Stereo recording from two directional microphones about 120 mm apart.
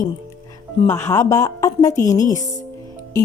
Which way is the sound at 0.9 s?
20° left (ahead or behind).